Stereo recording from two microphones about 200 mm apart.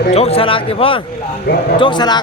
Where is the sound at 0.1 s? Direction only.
30° left (ahead or behind).